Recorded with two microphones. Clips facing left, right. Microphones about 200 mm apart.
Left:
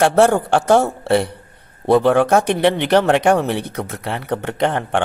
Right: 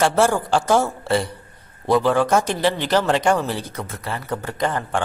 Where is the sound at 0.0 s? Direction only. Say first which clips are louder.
Left 5 dB; 60° left (ahead or behind).